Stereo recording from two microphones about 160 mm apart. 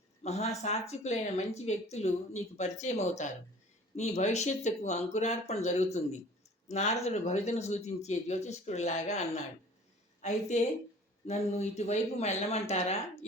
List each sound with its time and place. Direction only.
0.2 s speech: 45° left (ahead or behind)